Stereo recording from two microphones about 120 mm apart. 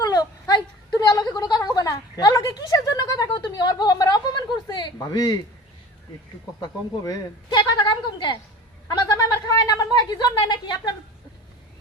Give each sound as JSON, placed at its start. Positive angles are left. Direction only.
{"t": 0.0, "sound": "whimper", "side_deg": 30}
{"t": 1.3, "sound": "a sound", "side_deg": 35}
{"t": 6.6, "sound": "a woman's voice", "side_deg": 35}